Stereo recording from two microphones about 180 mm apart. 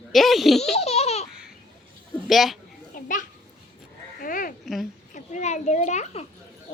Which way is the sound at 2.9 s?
50° left (ahead or behind).